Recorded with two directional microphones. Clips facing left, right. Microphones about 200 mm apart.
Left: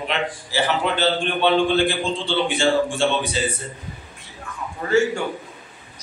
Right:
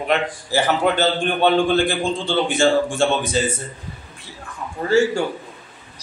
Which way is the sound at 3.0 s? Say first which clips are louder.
Right 3 dB; 45° right (ahead or behind).